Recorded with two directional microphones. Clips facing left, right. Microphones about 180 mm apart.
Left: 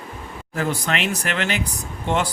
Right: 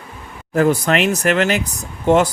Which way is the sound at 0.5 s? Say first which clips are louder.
Right 9 dB; 50° right (ahead or behind).